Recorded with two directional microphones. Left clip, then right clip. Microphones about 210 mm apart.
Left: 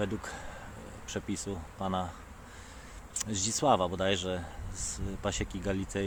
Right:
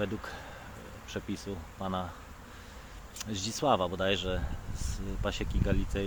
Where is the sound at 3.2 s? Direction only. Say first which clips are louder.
Left 2 dB; 15° left (ahead or behind).